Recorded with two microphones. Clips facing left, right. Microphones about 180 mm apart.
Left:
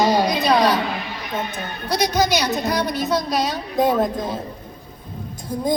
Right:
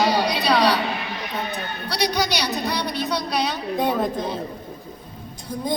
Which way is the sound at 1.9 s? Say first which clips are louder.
Left 4 dB; 45° left (ahead or behind).